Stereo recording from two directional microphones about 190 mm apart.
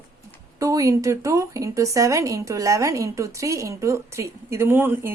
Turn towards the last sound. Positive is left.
turn(degrees=-10)  # may be behind; listen again after turning